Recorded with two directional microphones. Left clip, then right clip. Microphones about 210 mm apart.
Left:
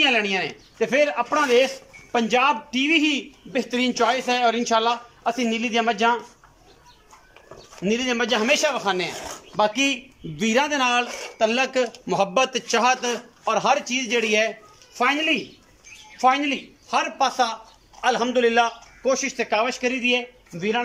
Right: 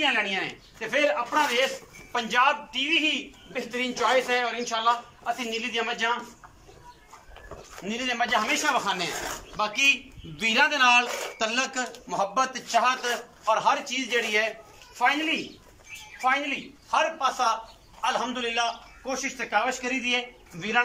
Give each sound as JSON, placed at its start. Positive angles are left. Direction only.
{"t": 0.0, "sound": "a man's voice", "side_deg": 50}
{"t": 7.8, "sound": "a man's voice", "side_deg": 55}
{"t": 11.1, "sound": "speech", "side_deg": 0}
{"t": 11.3, "sound": "a man's voice", "side_deg": 40}